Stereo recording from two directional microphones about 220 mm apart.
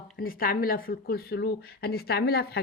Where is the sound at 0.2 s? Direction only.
40° left (ahead or behind).